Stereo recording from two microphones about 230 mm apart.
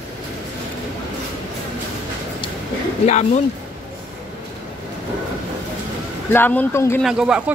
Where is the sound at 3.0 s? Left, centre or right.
Left.